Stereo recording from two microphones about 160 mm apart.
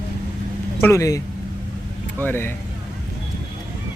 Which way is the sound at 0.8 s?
20° left (ahead or behind).